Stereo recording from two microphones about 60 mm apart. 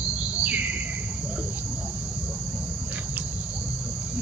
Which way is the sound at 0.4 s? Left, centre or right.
Right.